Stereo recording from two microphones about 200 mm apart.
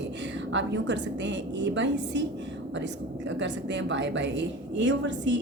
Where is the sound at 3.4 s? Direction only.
65° right (ahead or behind).